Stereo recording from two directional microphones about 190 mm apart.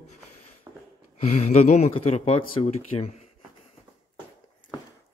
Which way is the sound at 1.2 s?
35° left (ahead or behind).